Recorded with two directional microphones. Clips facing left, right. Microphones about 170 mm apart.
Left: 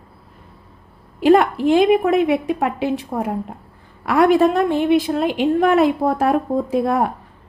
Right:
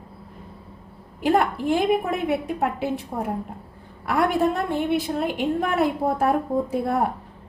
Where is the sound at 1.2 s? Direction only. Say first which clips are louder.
Left 7 dB; 90° left.